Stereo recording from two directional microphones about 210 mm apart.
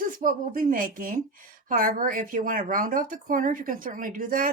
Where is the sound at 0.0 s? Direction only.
40° right (ahead or behind).